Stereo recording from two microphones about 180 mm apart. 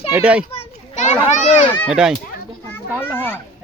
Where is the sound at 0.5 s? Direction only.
40° left (ahead or behind).